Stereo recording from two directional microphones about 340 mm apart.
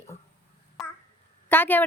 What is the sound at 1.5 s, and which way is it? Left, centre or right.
Speech, centre.